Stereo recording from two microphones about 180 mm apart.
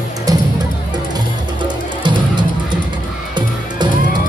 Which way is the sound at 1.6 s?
25° right (ahead or behind).